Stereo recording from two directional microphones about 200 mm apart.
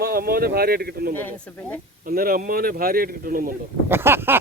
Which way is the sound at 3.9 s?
10° right (ahead or behind).